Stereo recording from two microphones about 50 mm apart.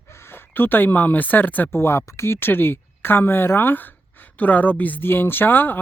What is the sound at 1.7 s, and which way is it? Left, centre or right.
Speech, left.